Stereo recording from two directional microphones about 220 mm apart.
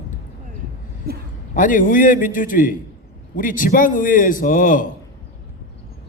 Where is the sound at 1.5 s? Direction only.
40° left (ahead or behind).